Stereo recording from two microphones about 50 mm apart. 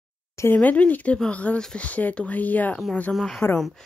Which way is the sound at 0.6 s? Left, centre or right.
Left.